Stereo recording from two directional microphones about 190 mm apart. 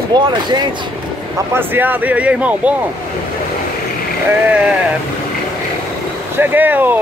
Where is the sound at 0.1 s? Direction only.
25° right (ahead or behind).